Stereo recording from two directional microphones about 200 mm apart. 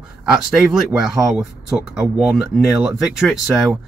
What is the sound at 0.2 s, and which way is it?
Speech, centre (ahead or behind).